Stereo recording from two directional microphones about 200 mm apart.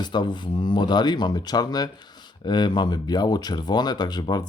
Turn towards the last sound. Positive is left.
turn(degrees=20)  # may be behind; listen again after turning